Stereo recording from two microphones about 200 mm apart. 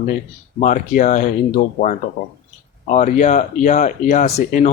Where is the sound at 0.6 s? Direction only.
40° left (ahead or behind).